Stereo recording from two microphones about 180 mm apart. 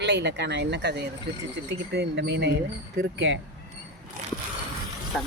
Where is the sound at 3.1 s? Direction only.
90° right.